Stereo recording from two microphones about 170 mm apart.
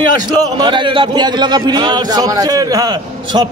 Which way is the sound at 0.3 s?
25° right (ahead or behind).